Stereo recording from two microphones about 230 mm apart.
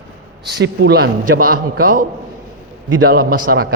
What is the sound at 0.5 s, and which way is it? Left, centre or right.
A man's voice, right.